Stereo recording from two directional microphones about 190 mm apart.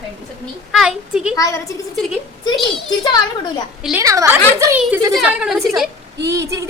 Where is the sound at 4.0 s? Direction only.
15° right (ahead or behind).